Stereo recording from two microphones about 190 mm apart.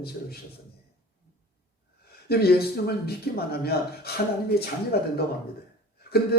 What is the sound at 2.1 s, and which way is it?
Speech, 55° left (ahead or behind).